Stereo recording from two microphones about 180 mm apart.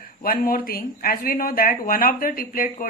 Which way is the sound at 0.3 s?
55° left (ahead or behind).